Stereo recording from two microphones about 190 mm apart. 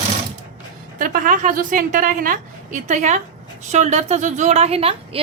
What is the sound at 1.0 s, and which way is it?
A woman's voice, 45° right (ahead or behind).